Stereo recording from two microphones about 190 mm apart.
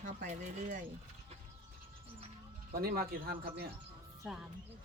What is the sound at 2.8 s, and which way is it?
Speech, 50° right (ahead or behind).